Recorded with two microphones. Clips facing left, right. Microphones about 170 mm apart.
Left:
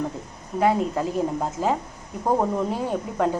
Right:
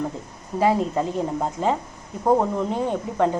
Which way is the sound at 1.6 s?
20° right (ahead or behind).